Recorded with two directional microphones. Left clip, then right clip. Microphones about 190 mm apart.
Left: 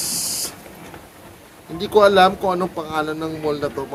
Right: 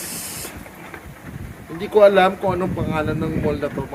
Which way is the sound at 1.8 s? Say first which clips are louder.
Even; 15° left (ahead or behind).